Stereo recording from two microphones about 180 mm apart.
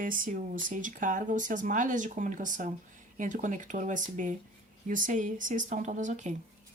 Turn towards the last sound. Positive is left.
turn(degrees=-40)  # may be behind; listen again after turning